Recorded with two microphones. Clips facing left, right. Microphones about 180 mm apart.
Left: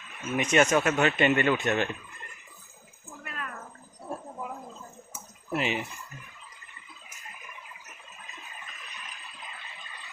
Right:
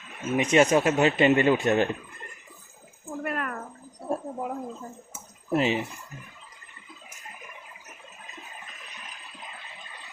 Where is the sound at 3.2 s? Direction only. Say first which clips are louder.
Right 10 dB; 55° right (ahead or behind).